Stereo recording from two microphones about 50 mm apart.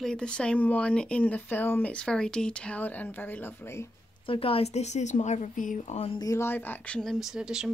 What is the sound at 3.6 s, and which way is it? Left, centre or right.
Speech, left.